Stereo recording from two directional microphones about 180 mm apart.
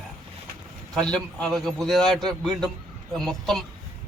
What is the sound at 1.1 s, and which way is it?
Speech, 5° left (ahead or behind).